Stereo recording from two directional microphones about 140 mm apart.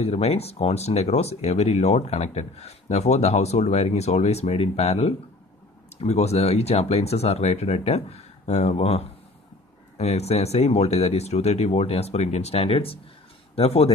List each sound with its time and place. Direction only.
0.0 s speech: 45° left (ahead or behind)